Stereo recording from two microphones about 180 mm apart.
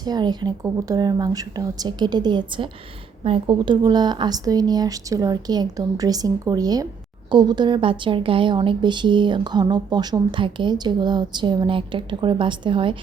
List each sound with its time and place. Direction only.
0.0 s a woman's voice: 25° right (ahead or behind)